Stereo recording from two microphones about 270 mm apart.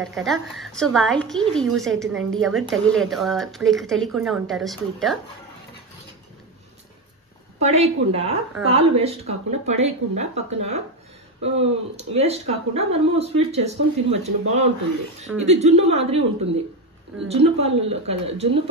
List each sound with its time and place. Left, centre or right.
0.2 s speech: centre
7.6 s speech: right
17.3 s speech: right